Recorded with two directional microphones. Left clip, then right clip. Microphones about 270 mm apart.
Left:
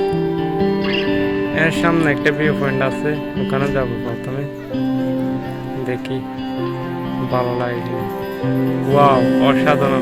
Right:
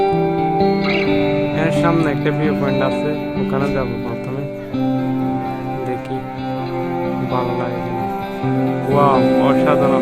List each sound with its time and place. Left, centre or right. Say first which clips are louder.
1.1 s music: right 2 dB; right
1.5 s speech: left 3 dB; centre
9.0 s speech: left 1 dB; centre